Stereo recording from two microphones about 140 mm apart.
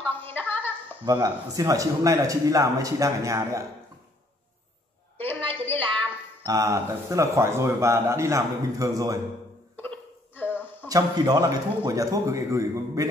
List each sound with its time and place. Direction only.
0.2 s a sound: 15° left (ahead or behind)
1.0 s speech: 25° right (ahead or behind)
5.1 s a sound: 15° left (ahead or behind)
5.7 s music: 10° left (ahead or behind)
6.4 s speech: 25° right (ahead or behind)
9.8 s hiccup: 15° left (ahead or behind)
10.9 s speech: 25° right (ahead or behind)